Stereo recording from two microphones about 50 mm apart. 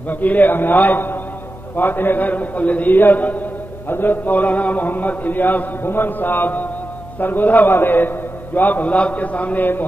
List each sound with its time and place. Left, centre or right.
0.1 s chant: left